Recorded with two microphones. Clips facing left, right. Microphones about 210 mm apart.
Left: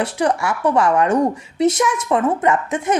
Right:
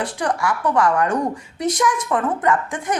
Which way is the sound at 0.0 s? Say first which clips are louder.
Left 3 dB; 25° left (ahead or behind).